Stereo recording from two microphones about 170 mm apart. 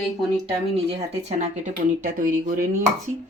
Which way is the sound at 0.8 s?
40° right (ahead or behind).